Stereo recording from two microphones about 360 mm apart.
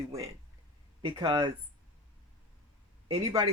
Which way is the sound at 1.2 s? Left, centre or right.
Centre.